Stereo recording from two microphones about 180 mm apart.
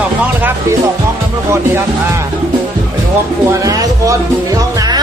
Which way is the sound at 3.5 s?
20° right (ahead or behind).